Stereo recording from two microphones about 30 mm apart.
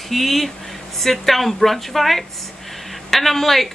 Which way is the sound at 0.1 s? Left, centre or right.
Centre.